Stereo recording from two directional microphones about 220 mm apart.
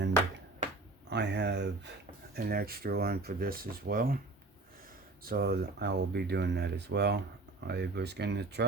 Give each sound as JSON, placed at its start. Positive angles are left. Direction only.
{"t": 1.1, "sound": "a sound", "side_deg": -50}
{"t": 2.3, "sound": "speech", "side_deg": -45}
{"t": 5.2, "sound": "speech", "side_deg": -45}